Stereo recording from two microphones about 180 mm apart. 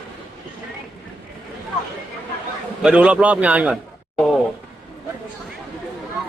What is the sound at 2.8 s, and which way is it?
Speech, 5° right (ahead or behind).